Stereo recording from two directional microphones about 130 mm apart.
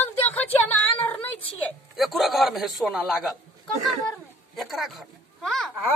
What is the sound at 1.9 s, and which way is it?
A woman's voice, centre (ahead or behind).